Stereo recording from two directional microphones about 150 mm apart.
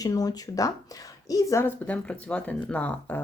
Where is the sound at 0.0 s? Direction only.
25° left (ahead or behind).